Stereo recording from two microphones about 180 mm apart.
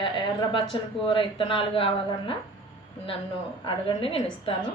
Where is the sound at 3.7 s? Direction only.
30° left (ahead or behind).